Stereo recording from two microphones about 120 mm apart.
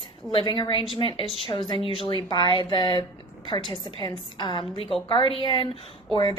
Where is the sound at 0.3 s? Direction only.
45° left (ahead or behind).